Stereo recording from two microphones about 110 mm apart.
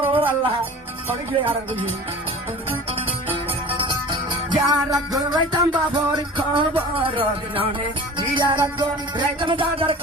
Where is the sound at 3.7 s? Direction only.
45° right (ahead or behind).